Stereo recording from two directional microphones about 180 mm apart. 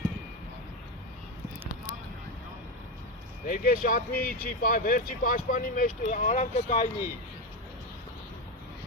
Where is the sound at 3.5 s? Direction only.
50° left (ahead or behind).